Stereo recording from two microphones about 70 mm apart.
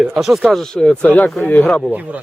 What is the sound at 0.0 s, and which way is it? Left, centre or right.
Speech, centre.